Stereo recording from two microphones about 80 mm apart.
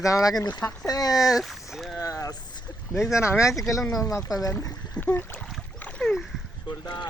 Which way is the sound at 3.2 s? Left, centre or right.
Left.